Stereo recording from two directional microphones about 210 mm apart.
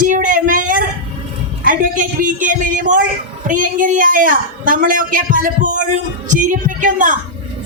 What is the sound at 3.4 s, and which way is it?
A woman's voice, 40° right (ahead or behind).